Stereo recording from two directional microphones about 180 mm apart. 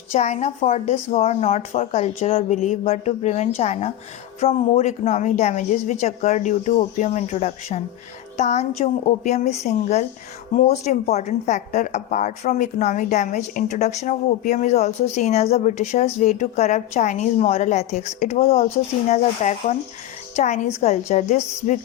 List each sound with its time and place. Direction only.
0.1 s speech: 40° left (ahead or behind)